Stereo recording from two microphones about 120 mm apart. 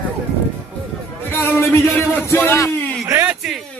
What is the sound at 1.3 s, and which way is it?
Speech, 20° left (ahead or behind).